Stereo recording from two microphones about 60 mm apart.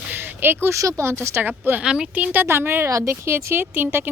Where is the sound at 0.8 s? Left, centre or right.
Right.